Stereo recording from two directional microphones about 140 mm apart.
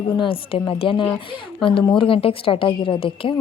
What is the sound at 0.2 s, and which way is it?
A woman's voice, 40° left (ahead or behind).